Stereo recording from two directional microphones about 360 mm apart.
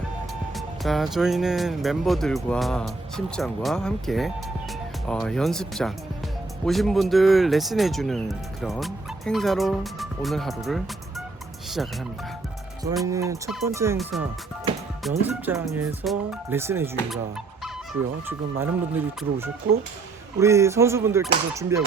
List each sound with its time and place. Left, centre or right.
0.5 s speech: centre
13.0 s speech: centre
18.3 s a sound: centre